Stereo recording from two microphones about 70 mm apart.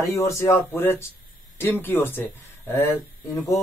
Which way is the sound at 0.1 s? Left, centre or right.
Left.